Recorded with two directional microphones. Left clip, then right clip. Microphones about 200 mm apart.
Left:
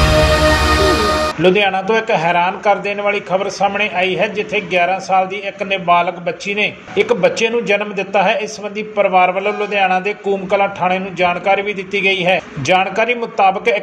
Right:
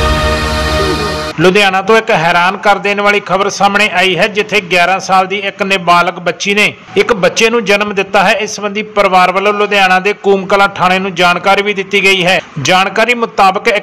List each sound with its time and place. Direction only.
1.4 s a man's voice: 25° right (ahead or behind)